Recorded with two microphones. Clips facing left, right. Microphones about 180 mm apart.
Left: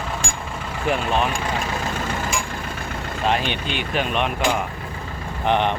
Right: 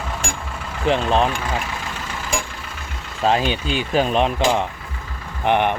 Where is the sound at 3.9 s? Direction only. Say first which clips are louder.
Right 5 dB; 35° right (ahead or behind).